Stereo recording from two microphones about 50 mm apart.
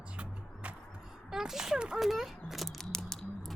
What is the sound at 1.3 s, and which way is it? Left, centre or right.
Speech, centre.